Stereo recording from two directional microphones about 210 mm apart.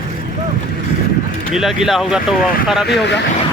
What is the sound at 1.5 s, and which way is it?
Speech, centre (ahead or behind).